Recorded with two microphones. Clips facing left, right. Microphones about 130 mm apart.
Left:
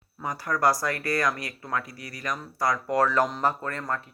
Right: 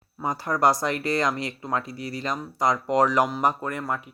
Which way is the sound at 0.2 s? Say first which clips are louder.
Right 3 dB; 25° right (ahead or behind).